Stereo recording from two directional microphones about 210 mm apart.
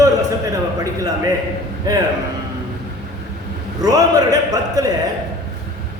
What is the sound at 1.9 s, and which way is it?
Speech, 15° right (ahead or behind).